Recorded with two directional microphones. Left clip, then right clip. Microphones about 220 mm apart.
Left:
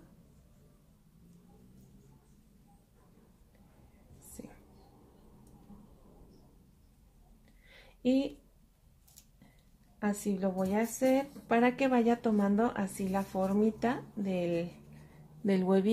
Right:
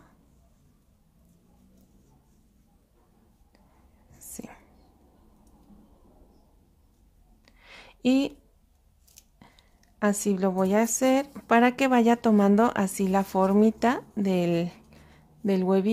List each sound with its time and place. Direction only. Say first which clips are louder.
7.6 s a sound: right 6 dB; 30° right (ahead or behind)
9.9 s a woman's voice: right 9 dB; 35° right (ahead or behind)
15.4 s speech: right 5 dB; 20° right (ahead or behind)